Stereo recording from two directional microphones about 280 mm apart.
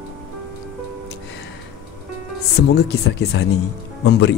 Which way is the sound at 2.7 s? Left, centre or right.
Left.